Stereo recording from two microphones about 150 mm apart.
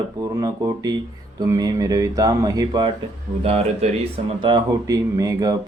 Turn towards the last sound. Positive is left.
turn(degrees=-25)  # may be behind; listen again after turning